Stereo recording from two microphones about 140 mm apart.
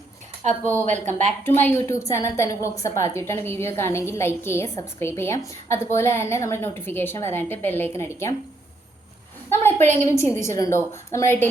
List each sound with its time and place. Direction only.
0.9 s speech: 55° right (ahead or behind)
1.5 s a woman's voice: 15° left (ahead or behind)
9.5 s a woman's voice: 15° left (ahead or behind)